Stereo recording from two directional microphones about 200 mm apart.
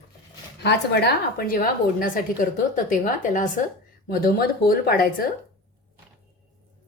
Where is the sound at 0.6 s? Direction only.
50° left (ahead or behind).